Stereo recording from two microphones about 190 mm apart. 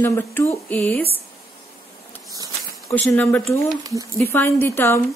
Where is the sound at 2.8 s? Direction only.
10° left (ahead or behind).